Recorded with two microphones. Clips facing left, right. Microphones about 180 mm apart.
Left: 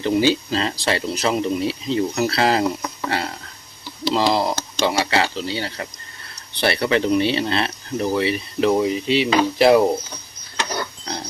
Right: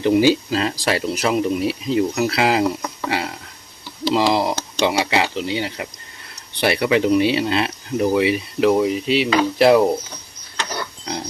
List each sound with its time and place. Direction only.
0.0 s speech: 15° right (ahead or behind)